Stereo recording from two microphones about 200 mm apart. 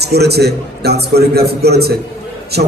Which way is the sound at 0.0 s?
55° right (ahead or behind).